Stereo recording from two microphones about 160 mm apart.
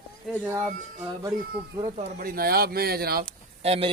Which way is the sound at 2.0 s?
55° right (ahead or behind).